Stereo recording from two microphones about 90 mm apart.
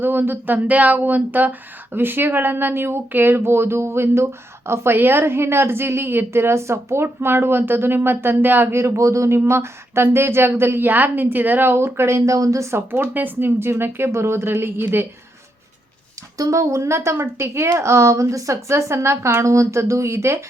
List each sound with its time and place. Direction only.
0.0 s speech: 25° right (ahead or behind)
16.4 s a woman's voice: 35° right (ahead or behind)